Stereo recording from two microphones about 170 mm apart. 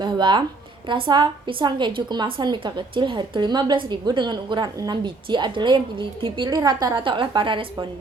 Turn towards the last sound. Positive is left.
turn(degrees=-30)  # may be behind; listen again after turning